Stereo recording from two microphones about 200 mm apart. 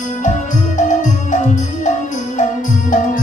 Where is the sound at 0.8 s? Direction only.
40° left (ahead or behind).